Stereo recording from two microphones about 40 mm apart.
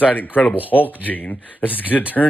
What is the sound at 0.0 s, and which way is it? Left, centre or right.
Speech, left.